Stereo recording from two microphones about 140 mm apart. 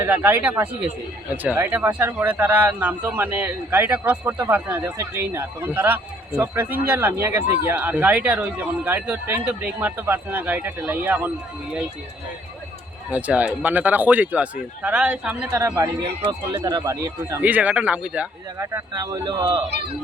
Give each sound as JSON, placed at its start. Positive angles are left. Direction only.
{"t": 0.0, "sound": "speech", "side_deg": -15}
{"t": 13.1, "sound": "speech", "side_deg": -10}
{"t": 15.5, "sound": "speech", "side_deg": -25}
{"t": 18.6, "sound": "speech", "side_deg": -20}